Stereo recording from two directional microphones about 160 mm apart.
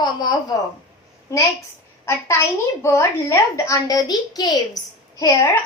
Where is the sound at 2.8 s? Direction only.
15° left (ahead or behind).